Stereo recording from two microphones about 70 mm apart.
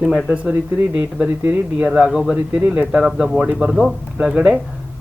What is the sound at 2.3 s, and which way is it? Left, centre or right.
Speech, right.